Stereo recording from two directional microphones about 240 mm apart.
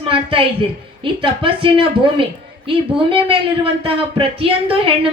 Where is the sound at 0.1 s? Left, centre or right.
Right.